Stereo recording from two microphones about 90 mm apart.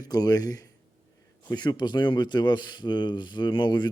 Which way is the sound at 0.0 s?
45° left (ahead or behind).